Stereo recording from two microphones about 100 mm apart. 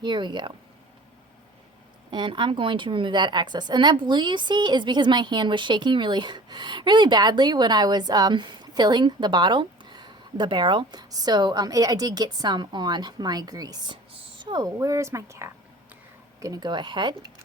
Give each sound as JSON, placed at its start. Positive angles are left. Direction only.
{"t": 0.0, "sound": "a woman's voice", "side_deg": -50}
{"t": 2.0, "sound": "a woman's voice", "side_deg": -50}
{"t": 13.9, "sound": "a sound", "side_deg": -55}
{"t": 14.6, "sound": "speech", "side_deg": -35}
{"t": 16.4, "sound": "a woman's voice", "side_deg": -40}